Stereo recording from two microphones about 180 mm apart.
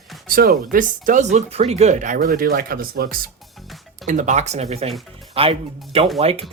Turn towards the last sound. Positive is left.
turn(degrees=-35)  # may be behind; listen again after turning